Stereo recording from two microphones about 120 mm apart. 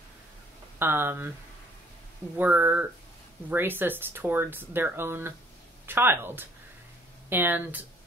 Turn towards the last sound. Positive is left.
turn(degrees=-15)  # may be behind; listen again after turning